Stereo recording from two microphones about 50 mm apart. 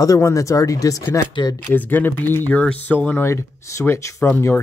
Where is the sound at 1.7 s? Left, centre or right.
Left.